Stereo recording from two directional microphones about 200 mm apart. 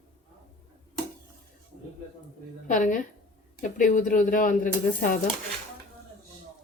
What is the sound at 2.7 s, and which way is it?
Speech, 40° left (ahead or behind).